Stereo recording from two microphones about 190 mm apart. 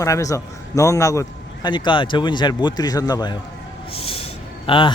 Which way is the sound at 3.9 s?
30° left (ahead or behind).